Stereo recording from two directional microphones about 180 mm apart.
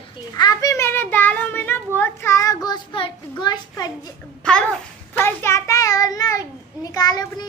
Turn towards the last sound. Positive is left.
turn(degrees=20)  # may be behind; listen again after turning